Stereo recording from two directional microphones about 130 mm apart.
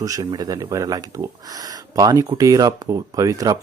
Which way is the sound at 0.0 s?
25° right (ahead or behind).